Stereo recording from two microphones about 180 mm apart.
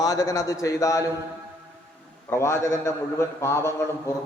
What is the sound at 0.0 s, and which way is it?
A man's voice, 20° left (ahead or behind).